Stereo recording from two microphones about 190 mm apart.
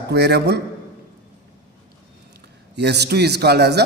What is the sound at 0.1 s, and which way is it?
Speech, 60° right (ahead or behind).